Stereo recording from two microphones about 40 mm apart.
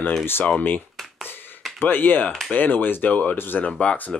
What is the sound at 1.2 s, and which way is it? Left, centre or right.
Finger snapping, left.